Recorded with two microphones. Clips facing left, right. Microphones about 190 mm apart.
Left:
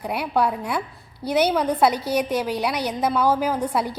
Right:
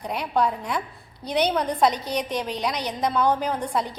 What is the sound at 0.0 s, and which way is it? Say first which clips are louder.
A woman's voice: left 2 dB; 5° left (ahead or behind).